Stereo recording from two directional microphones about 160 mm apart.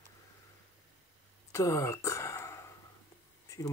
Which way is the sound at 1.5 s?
20° left (ahead or behind).